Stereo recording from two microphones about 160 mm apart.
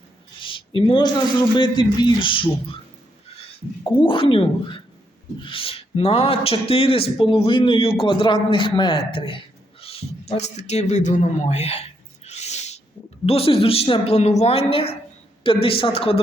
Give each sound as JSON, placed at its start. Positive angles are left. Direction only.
{"t": 0.3, "sound": "speech", "side_deg": 35}
{"t": 3.8, "sound": "speech", "side_deg": 35}
{"t": 9.8, "sound": "a sound", "side_deg": 40}
{"t": 13.2, "sound": "speech", "side_deg": 35}